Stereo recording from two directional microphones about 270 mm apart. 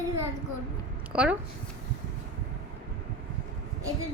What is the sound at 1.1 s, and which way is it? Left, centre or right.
Speech, centre.